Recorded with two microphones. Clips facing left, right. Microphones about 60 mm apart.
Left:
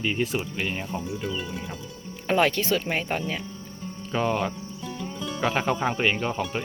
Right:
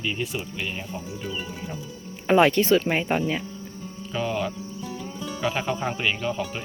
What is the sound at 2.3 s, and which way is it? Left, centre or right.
Speech, centre.